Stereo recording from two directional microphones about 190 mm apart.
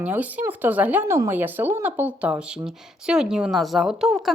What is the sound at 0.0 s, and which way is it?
Speech, 10° right (ahead or behind).